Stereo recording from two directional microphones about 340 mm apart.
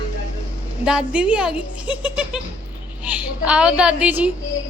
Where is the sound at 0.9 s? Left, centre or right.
Centre.